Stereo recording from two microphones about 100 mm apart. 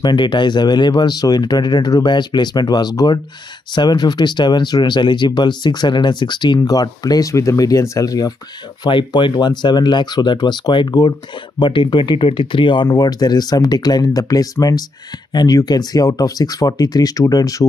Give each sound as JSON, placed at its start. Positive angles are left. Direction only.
{"t": 0.0, "sound": "speech", "side_deg": 50}
{"t": 8.8, "sound": "speech", "side_deg": 50}